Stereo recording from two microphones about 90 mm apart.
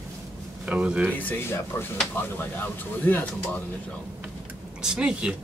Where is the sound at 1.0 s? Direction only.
20° left (ahead or behind).